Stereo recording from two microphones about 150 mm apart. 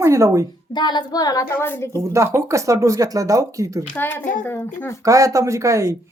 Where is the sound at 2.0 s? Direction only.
20° right (ahead or behind).